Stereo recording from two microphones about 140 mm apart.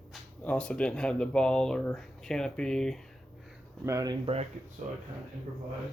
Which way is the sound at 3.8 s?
25° right (ahead or behind).